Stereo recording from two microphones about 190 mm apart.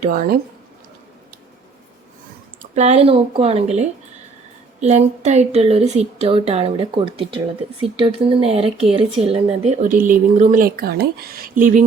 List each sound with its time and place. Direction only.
0.0 s speech: 45° right (ahead or behind)
2.6 s speech: 35° right (ahead or behind)